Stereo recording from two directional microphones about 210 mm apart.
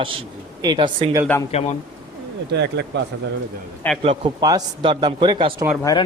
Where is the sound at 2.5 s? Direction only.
55° right (ahead or behind).